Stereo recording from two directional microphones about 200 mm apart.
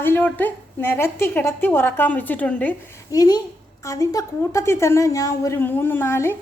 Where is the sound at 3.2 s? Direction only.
20° left (ahead or behind).